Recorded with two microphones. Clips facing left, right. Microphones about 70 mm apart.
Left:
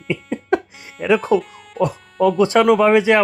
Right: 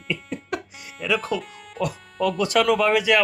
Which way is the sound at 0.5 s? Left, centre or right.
Left.